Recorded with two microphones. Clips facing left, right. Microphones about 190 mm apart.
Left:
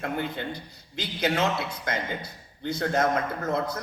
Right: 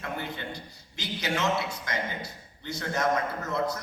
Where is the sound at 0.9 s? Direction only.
55° left (ahead or behind).